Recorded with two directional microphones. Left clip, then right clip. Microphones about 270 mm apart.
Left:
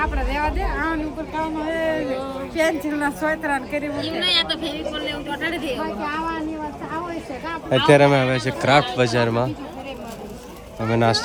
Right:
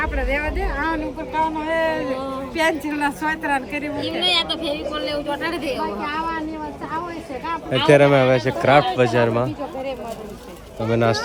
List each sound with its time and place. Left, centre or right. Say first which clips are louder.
0.8 s a sound: right 2 dB; centre
1.5 s speech: right 2 dB; centre
7.7 s speech: even; centre
10.8 s speech: even; centre